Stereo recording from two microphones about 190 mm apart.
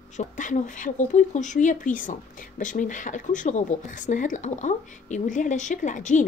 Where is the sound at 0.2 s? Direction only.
40° left (ahead or behind).